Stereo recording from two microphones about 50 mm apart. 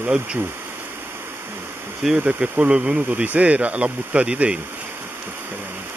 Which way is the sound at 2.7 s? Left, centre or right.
Right.